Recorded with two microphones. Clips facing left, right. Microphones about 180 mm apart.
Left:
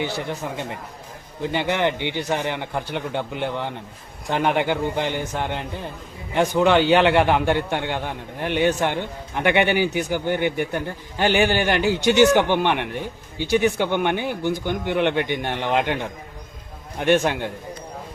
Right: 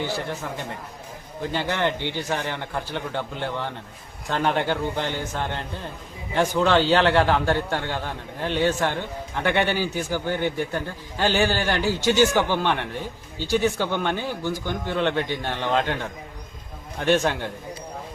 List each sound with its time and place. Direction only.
0.0 s a man's voice: 15° left (ahead or behind)